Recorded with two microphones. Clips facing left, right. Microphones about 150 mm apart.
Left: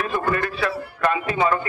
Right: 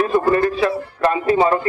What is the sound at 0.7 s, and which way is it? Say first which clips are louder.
Speech: right 4 dB; 30° right (ahead or behind).